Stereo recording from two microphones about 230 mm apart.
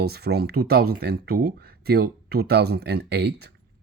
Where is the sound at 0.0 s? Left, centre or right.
Right.